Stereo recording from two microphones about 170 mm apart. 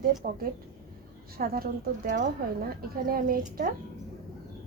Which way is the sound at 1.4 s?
60° right (ahead or behind).